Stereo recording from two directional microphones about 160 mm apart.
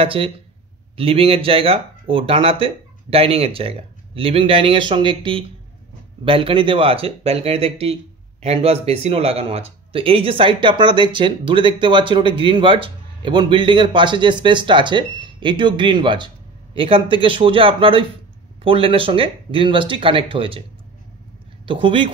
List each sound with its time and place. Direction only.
0.0 s speech: 35° right (ahead or behind)
21.6 s speech: 30° right (ahead or behind)